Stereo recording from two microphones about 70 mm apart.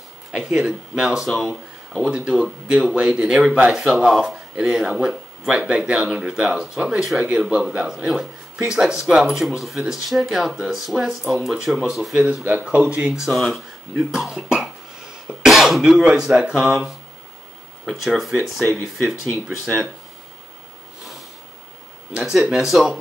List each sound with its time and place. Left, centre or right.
0.3 s speech: centre
12.4 s speech: right
13.3 s speech: centre
15.2 s cough: centre
16.0 s speech: centre
19.1 s speech: left
19.4 s speech: centre
22.1 s speech: centre